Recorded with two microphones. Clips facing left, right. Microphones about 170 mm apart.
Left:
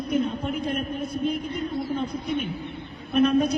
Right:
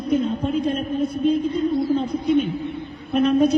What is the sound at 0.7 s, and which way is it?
Speech, 25° right (ahead or behind).